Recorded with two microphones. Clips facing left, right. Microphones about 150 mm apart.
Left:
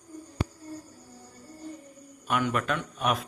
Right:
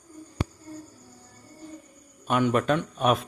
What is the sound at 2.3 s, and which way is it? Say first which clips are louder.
Speech: right 5 dB; 25° right (ahead or behind).